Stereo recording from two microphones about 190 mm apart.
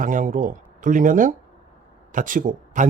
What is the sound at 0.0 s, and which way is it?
Speech, 45° right (ahead or behind).